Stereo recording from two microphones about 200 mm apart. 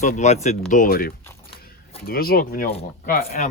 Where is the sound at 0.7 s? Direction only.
45° left (ahead or behind).